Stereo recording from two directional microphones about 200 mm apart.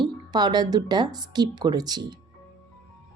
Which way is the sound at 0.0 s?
20° right (ahead or behind).